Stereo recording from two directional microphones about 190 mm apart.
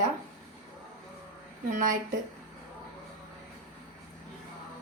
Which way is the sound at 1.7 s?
45° right (ahead or behind).